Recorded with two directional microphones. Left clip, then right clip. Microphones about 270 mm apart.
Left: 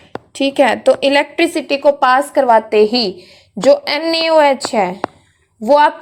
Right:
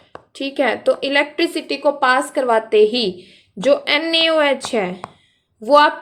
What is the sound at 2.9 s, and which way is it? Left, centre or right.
Speech, centre.